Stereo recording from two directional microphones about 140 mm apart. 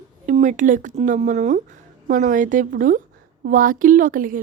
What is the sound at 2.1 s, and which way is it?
A woman's voice, 65° right (ahead or behind).